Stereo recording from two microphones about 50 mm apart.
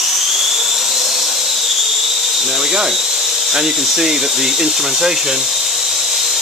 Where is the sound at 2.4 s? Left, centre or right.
Centre.